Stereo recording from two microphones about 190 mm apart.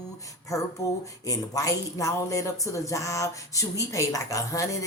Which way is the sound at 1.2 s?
15° left (ahead or behind).